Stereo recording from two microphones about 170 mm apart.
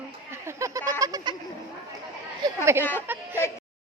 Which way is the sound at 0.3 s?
15° right (ahead or behind).